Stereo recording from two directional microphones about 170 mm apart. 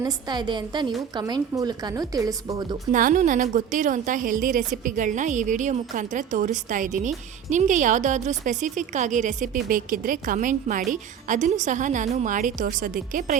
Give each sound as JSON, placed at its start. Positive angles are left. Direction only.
{"t": 0.0, "sound": "a woman's voice", "side_deg": -25}
{"t": 2.9, "sound": "a woman's voice", "side_deg": -50}